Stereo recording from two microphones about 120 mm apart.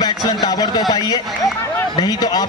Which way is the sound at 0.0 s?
35° left (ahead or behind).